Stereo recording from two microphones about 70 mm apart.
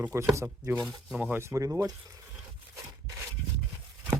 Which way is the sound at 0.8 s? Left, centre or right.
Centre.